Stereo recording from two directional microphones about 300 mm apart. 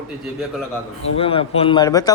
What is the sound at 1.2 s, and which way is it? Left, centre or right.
Speech, centre.